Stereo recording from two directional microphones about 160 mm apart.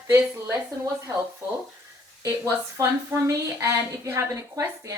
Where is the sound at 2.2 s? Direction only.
15° right (ahead or behind).